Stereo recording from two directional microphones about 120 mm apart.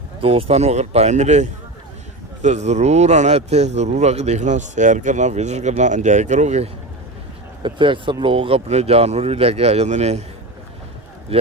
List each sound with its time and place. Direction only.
0.2 s speech: 50° right (ahead or behind); by 6.7 s 75° right (ahead or behind)
7.6 s speech: 45° right (ahead or behind); by 10.2 s 65° right (ahead or behind)
11.3 s speech: 55° right (ahead or behind)